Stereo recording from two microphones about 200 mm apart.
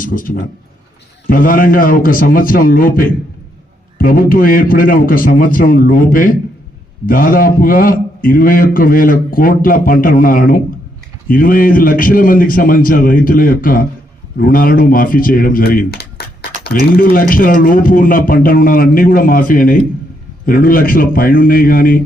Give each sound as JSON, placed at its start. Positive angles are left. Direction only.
{"t": 0.0, "sound": "a man's voice", "side_deg": 45}